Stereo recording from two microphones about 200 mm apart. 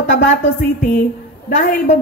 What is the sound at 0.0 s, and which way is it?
Speech, 65° left (ahead or behind).